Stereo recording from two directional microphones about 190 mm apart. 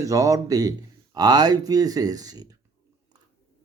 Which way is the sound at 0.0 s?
15° right (ahead or behind).